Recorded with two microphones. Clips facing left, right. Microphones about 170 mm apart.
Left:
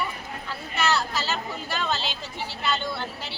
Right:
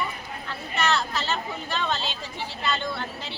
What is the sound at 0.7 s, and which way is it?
Speech, 10° left (ahead or behind).